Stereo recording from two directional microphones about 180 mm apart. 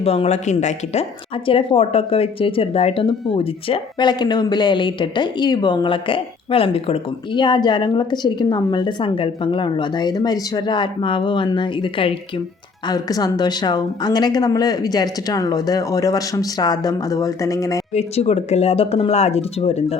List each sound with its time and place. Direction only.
0.0 s speech: 35° left (ahead or behind); by 17.8 s 20° left (ahead or behind)
17.9 s speech: 35° left (ahead or behind)